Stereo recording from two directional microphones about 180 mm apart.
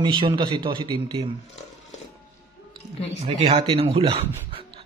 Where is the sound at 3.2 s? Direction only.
35° right (ahead or behind).